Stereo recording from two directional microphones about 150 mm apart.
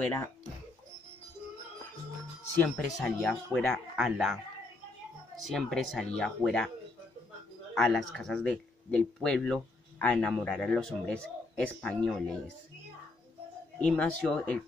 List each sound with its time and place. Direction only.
0.0 s speech: 10° left (ahead or behind)
3.0 s speech: 5° left (ahead or behind)
5.4 s speech: centre (ahead or behind)
7.7 s speech: centre (ahead or behind)
13.8 s speech: 5° left (ahead or behind)